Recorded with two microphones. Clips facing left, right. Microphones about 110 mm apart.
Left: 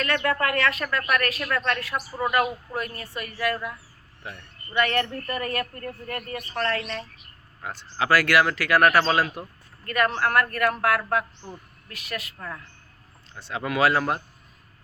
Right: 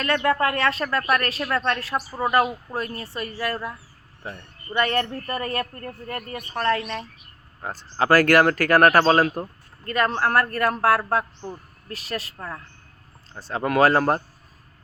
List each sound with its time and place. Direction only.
0.0 s speech: 25° right (ahead or behind)
6.5 s speech: 15° right (ahead or behind)
7.6 s speech: 40° right (ahead or behind)
9.8 s a man's voice: 30° right (ahead or behind)